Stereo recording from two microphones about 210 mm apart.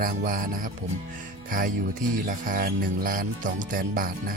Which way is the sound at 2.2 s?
40° right (ahead or behind).